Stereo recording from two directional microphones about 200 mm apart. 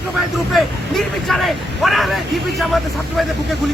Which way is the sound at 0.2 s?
Centre (ahead or behind).